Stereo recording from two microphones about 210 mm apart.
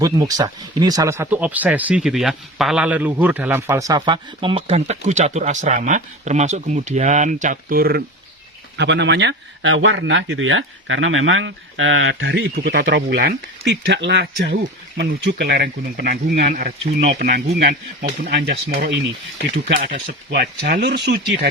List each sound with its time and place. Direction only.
0.0 s speech: 15° right (ahead or behind); by 8.0 s 45° right (ahead or behind)
8.8 s speech: 55° right (ahead or behind)
19.6 s speech: 45° right (ahead or behind)